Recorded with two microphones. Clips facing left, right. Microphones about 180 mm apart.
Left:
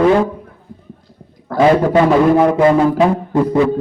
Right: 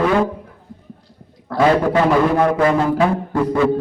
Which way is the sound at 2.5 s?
25° left (ahead or behind).